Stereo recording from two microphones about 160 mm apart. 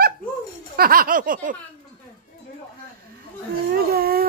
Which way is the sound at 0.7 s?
70° right (ahead or behind).